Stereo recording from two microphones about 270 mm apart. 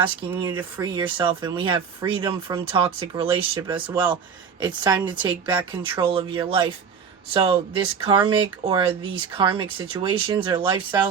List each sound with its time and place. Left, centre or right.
0.0 s speech: centre